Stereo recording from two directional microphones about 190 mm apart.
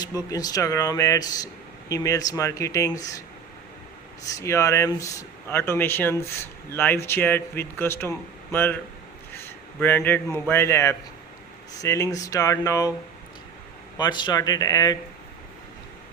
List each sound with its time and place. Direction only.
0.3 s speech: 20° left (ahead or behind)
4.3 s a man's voice: 15° left (ahead or behind)
14.0 s speech: 25° left (ahead or behind)